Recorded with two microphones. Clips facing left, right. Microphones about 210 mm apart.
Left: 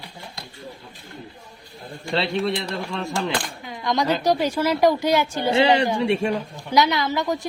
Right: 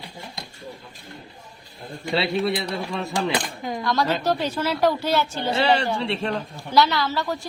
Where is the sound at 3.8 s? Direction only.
20° left (ahead or behind).